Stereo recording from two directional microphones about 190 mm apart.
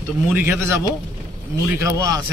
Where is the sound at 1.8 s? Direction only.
15° right (ahead or behind).